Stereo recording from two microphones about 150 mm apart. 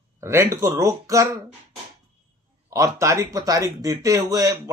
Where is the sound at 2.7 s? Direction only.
20° right (ahead or behind).